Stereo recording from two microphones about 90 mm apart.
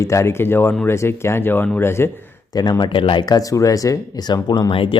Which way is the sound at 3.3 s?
40° left (ahead or behind).